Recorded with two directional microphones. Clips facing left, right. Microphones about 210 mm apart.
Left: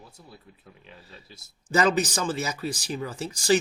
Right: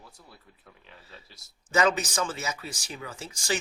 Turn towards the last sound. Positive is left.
turn(degrees=35)  # may be behind; listen again after turning